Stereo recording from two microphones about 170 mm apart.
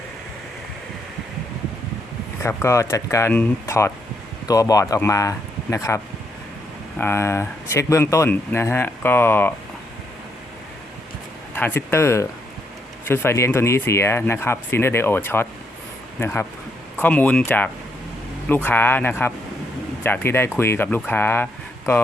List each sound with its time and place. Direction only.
2.4 s speech: 15° left (ahead or behind)
7.0 s speech: 15° left (ahead or behind)
11.5 s speech: 10° left (ahead or behind)